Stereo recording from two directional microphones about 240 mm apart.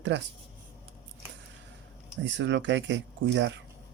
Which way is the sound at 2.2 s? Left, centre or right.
Right.